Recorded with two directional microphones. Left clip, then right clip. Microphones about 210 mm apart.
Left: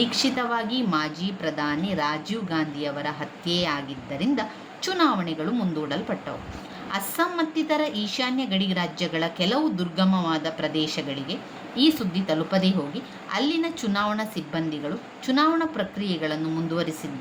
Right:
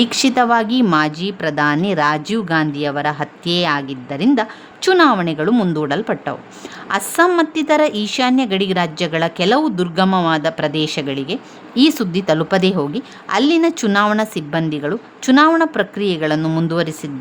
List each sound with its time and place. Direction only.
0.0 s a woman's voice: 55° right (ahead or behind)